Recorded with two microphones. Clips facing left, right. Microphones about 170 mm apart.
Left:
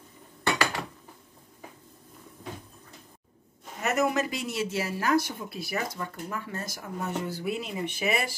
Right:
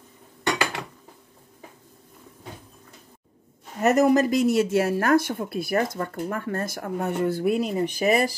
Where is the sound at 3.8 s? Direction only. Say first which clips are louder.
Right 8 dB; 40° right (ahead or behind).